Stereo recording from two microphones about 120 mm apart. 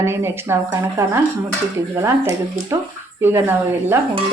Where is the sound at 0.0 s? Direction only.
20° right (ahead or behind).